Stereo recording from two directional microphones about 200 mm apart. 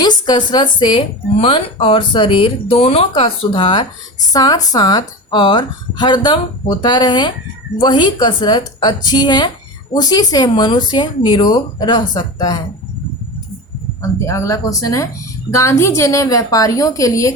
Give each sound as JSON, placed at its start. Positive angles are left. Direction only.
{"t": 0.0, "sound": "a woman's voice", "side_deg": 20}
{"t": 14.0, "sound": "a woman's voice", "side_deg": 15}